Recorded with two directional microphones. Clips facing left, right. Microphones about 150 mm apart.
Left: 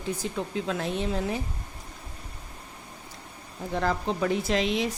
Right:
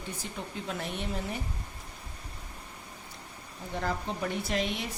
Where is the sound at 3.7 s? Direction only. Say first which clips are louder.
Left 6 dB; 90° left.